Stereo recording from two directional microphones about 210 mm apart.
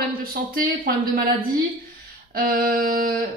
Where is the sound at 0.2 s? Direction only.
45° right (ahead or behind).